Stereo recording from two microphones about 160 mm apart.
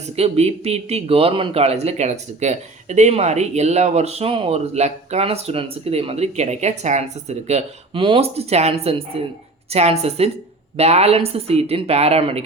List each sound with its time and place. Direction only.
0.2 s speech: 40° right (ahead or behind)